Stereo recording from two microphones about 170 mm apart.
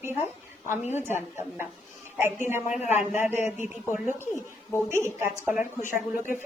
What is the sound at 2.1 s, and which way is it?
A woman's voice, 15° right (ahead or behind).